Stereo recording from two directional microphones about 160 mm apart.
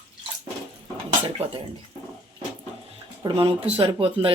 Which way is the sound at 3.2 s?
35° right (ahead or behind).